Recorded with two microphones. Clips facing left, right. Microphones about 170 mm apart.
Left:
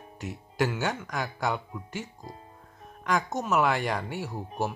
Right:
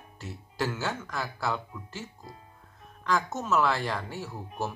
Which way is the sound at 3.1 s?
15° left (ahead or behind).